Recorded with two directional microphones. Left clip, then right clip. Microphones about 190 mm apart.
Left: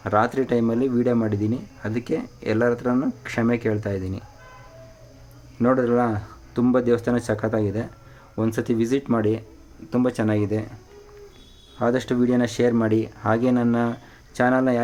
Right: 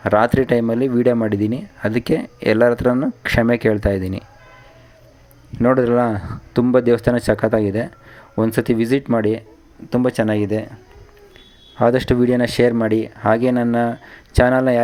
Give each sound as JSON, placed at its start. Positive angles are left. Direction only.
{"t": 0.0, "sound": "speech", "side_deg": -25}
{"t": 5.5, "sound": "speech", "side_deg": -25}
{"t": 11.8, "sound": "speech", "side_deg": -25}